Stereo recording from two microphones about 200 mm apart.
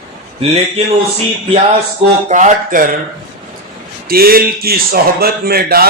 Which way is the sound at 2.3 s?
40° right (ahead or behind).